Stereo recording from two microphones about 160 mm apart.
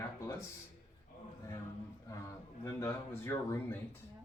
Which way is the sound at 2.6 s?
15° left (ahead or behind).